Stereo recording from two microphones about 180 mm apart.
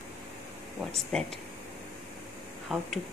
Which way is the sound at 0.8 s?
Centre (ahead or behind).